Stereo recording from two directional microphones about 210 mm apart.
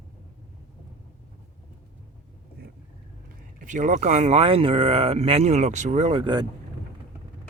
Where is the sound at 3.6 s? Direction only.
35° right (ahead or behind).